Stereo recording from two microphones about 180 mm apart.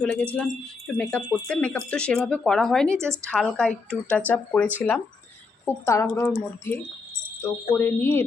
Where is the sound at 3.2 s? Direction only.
5° left (ahead or behind).